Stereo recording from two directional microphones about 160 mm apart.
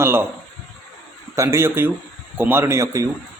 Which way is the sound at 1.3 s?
20° right (ahead or behind).